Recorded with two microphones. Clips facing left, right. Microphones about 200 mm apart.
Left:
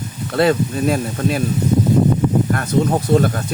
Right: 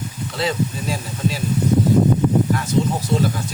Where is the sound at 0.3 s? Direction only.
60° left (ahead or behind).